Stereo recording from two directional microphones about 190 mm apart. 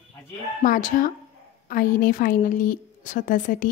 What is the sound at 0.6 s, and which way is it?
A woman's voice, 45° left (ahead or behind).